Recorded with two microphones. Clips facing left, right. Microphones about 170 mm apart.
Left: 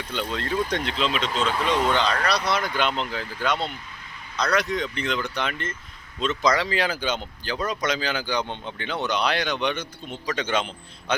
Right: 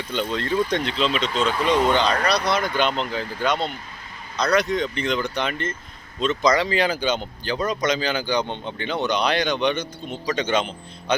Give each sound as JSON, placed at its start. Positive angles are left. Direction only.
{"t": 0.1, "sound": "speech", "side_deg": 5}